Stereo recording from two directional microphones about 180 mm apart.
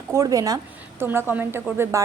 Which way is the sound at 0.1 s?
20° right (ahead or behind).